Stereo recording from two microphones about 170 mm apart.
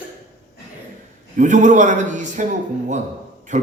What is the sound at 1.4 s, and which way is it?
A man's voice, 45° right (ahead or behind).